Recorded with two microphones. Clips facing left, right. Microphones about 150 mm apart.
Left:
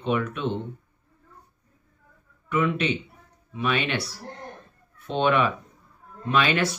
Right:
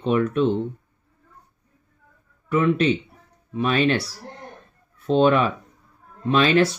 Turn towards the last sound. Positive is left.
turn(degrees=-30)  # may be behind; listen again after turning